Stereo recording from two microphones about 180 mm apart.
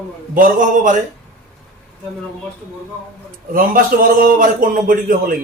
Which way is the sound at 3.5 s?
50° right (ahead or behind).